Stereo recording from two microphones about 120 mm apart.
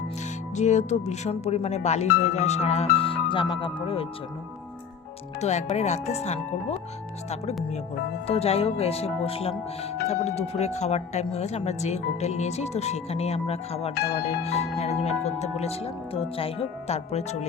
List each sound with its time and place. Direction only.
0.5 s speech: 75° left (ahead or behind)
3.1 s speech: 45° left (ahead or behind)
5.4 s speech: 70° left (ahead or behind)
8.3 s speech: 55° left (ahead or behind)